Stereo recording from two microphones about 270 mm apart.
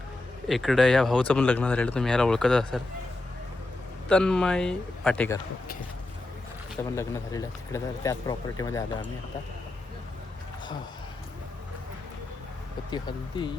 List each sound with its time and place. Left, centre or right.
0.4 s speech: centre
4.1 s speech: centre
6.9 s speech: centre
12.9 s speech: centre